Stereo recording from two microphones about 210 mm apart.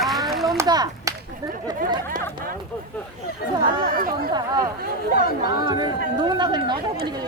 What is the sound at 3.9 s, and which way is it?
Chatter, 45° right (ahead or behind).